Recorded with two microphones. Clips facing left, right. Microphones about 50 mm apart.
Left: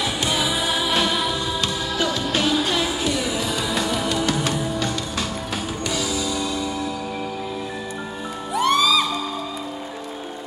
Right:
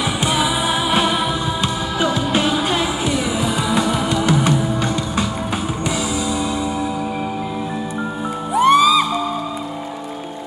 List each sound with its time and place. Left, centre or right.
0.0 s music: right
8.5 s music: centre